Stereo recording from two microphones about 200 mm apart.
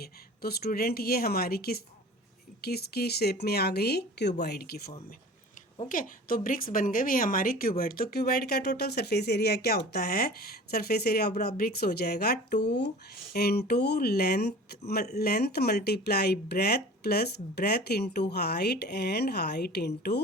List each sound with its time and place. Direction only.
0.0 s a woman's voice: 50° left (ahead or behind)